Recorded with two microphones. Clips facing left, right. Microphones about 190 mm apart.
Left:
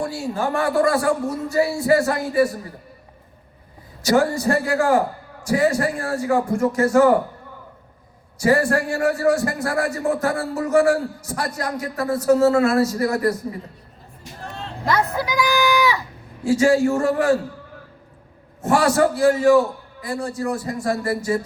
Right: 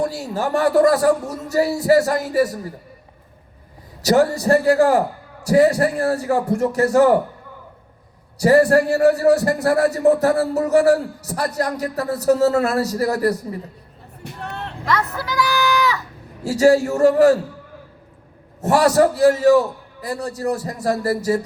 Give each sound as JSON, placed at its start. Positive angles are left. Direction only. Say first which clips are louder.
{"t": 0.0, "sound": "a sound", "louder": "right 2 dB", "side_deg": -40}
{"t": 0.5, "sound": "a man's voice", "louder": "right 5 dB", "side_deg": -40}
{"t": 4.0, "sound": "a man's voice", "louder": "right 2 dB", "side_deg": -40}
{"t": 8.4, "sound": "a man's voice", "louder": "right 5 dB", "side_deg": -35}
{"t": 14.3, "sound": "vehicle", "louder": "right 3 dB", "side_deg": -65}
{"t": 15.1, "sound": "speech", "louder": "left 1 dB", "side_deg": 15}
{"t": 16.4, "sound": "a man's voice", "louder": "right 2 dB", "side_deg": -40}
{"t": 18.6, "sound": "a man's voice", "louder": "right 3 dB", "side_deg": -35}